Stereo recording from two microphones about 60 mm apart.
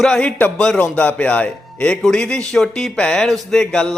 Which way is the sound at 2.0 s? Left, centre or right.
Centre.